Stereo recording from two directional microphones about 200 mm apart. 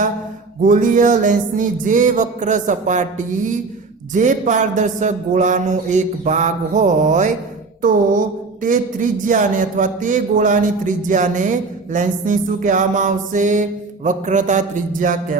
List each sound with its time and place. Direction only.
0.6 s a man's voice: 40° right (ahead or behind)
7.8 s music: 40° right (ahead or behind)
8.6 s a man's voice: 40° right (ahead or behind)